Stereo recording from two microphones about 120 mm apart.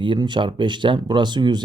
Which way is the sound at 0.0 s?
40° right (ahead or behind).